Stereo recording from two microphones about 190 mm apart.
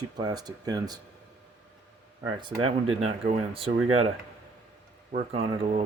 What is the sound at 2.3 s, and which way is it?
Speech, 25° right (ahead or behind).